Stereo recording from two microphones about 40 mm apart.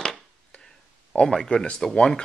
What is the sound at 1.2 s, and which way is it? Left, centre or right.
Speech, centre.